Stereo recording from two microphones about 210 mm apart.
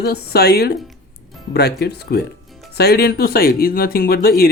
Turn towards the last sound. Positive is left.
turn(degrees=45)  # may be behind; listen again after turning